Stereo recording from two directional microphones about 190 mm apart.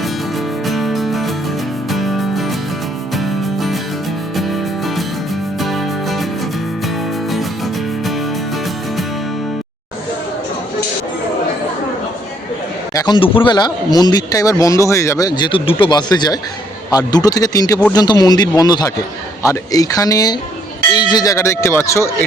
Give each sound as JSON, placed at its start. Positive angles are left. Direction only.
{"t": 0.7, "sound": "music", "side_deg": 0}
{"t": 12.9, "sound": "a man's voice", "side_deg": 20}